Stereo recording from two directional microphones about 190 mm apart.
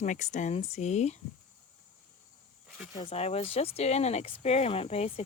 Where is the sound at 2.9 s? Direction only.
30° left (ahead or behind).